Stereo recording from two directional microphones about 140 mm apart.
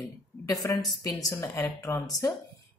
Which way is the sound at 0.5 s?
25° left (ahead or behind).